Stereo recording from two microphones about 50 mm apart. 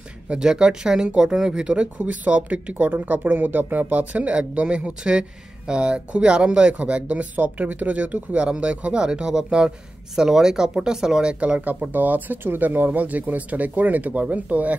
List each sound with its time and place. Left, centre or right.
0.3 s speech: centre
1.7 s speech: right
2.9 s speech: right